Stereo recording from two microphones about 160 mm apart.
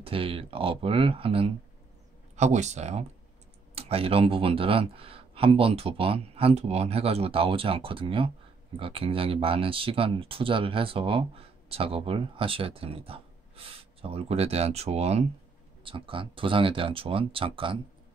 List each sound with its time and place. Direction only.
0.0 s speech: 35° right (ahead or behind)
2.3 s speech: 45° right (ahead or behind)